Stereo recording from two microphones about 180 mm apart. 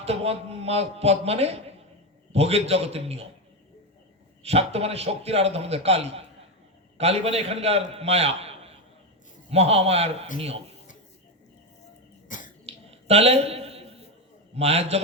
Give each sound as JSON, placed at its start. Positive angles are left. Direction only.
{"t": 0.0, "sound": "a man's voice", "side_deg": -35}
{"t": 4.4, "sound": "a man's voice", "side_deg": -35}
{"t": 12.3, "sound": "sneeze", "side_deg": 45}
{"t": 12.6, "sound": "a sound", "side_deg": -35}
{"t": 14.5, "sound": "a man's voice", "side_deg": -35}